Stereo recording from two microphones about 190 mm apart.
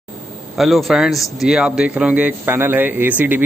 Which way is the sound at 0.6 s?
Centre (ahead or behind).